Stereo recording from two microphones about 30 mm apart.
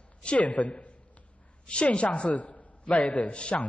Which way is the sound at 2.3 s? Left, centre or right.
Left.